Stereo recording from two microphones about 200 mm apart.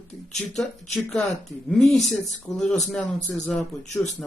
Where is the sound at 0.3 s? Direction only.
Centre (ahead or behind).